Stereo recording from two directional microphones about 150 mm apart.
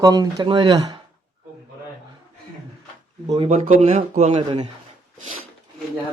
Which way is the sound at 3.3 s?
35° right (ahead or behind).